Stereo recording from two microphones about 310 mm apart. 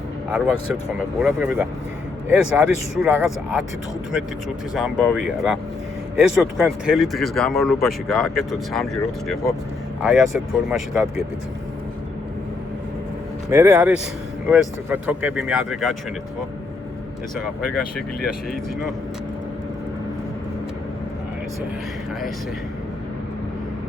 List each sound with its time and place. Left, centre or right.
0.3 s speech: centre
13.5 s speech: centre